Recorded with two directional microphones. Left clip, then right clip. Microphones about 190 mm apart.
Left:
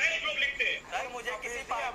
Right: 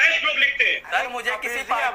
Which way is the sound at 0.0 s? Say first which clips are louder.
Right 11 dB; 50° right (ahead or behind).